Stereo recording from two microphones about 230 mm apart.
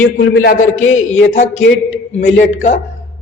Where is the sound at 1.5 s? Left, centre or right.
Left.